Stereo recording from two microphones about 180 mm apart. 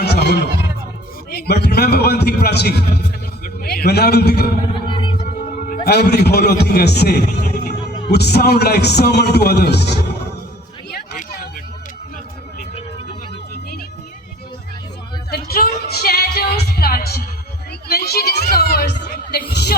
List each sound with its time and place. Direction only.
0.0 s music: 65° left (ahead or behind)
1.3 s a man's voice: 65° left (ahead or behind)
4.9 s music: 30° left (ahead or behind)
5.2 s music: 50° left (ahead or behind); by 7.9 s 70° left (ahead or behind)
8.1 s a man's voice: 65° left (ahead or behind)
10.9 s a sound: 55° left (ahead or behind)
15.3 s music: 60° left (ahead or behind)